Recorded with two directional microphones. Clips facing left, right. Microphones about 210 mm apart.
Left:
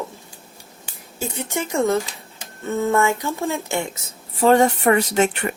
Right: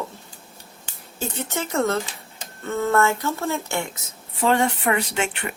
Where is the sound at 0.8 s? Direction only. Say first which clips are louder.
Left 1 dB; 10° left (ahead or behind).